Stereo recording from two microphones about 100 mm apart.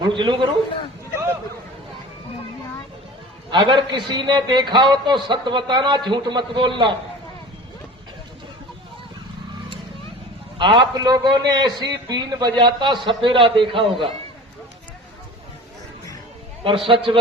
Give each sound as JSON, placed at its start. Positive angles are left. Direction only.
{"t": 0.0, "sound": "a man's voice", "side_deg": -55}
{"t": 3.5, "sound": "a man's voice", "side_deg": -50}
{"t": 10.6, "sound": "a man's voice", "side_deg": -55}
{"t": 10.9, "sound": "a man's voice", "side_deg": -45}
{"t": 16.6, "sound": "a man's voice", "side_deg": -60}